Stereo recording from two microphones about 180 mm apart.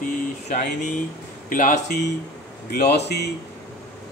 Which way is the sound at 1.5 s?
50° left (ahead or behind).